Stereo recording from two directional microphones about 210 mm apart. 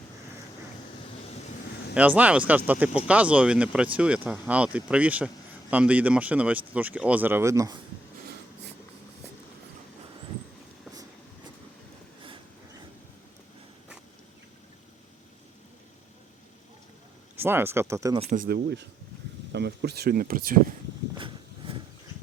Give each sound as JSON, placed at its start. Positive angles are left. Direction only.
{"t": 2.0, "sound": "speech", "side_deg": -5}
{"t": 17.3, "sound": "speech", "side_deg": -10}
{"t": 18.2, "sound": "speech", "side_deg": -35}
{"t": 18.4, "sound": "speech", "side_deg": -55}
{"t": 21.2, "sound": "a sound", "side_deg": -25}